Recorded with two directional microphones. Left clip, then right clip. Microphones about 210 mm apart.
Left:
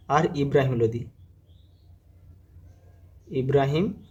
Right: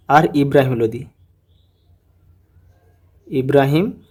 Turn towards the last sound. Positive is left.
turn(degrees=-40)  # may be behind; listen again after turning